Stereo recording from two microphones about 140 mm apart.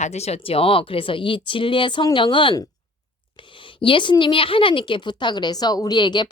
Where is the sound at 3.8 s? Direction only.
35° left (ahead or behind).